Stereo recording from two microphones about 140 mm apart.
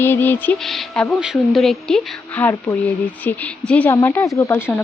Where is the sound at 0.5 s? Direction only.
Centre (ahead or behind).